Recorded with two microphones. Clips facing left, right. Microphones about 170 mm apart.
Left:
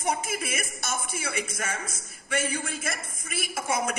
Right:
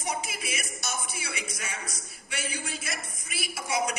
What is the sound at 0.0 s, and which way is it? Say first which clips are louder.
A man's voice: left 5 dB; 50° left (ahead or behind).